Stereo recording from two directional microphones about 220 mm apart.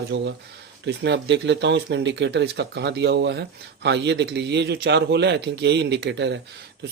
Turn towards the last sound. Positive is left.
turn(degrees=-50)  # may be behind; listen again after turning